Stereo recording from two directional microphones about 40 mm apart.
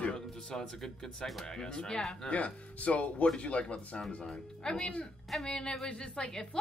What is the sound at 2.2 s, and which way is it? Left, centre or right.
A woman's voice, left.